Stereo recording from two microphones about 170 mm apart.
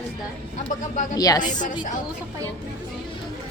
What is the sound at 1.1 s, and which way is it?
Speech, 20° left (ahead or behind).